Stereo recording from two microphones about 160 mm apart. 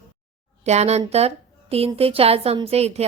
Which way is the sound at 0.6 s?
45° right (ahead or behind).